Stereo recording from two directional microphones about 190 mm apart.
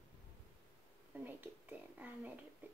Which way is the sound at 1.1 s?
10° right (ahead or behind).